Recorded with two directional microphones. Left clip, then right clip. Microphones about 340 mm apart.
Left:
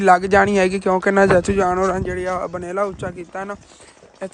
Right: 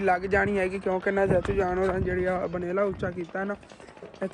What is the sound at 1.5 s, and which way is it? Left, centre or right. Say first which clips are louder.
Speech: left 8 dB; left.